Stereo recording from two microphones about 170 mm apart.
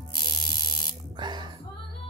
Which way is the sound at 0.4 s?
65° left (ahead or behind).